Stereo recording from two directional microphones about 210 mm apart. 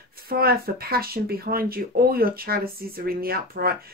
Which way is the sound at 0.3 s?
45° right (ahead or behind).